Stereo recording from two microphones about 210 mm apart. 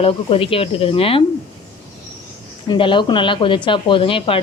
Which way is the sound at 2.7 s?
25° left (ahead or behind).